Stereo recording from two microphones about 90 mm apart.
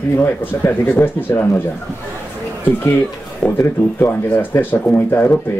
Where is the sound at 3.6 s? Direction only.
25° left (ahead or behind).